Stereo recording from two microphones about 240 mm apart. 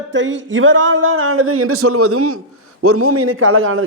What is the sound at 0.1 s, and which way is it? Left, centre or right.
A man's voice, right.